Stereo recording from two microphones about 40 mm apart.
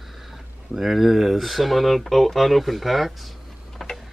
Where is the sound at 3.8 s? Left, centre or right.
Centre.